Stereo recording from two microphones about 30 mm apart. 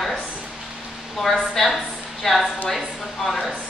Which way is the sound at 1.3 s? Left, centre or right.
Centre.